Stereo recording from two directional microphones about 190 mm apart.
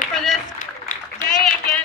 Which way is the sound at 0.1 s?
Centre (ahead or behind).